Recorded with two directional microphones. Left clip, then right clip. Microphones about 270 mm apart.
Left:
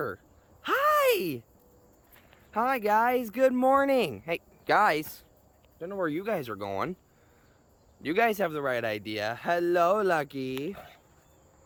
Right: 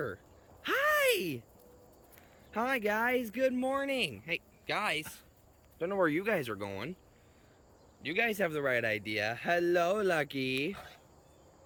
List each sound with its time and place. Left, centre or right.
0.6 s a sound: centre
2.5 s speech: centre
5.8 s speech: centre
8.0 s speech: centre
10.7 s speech: left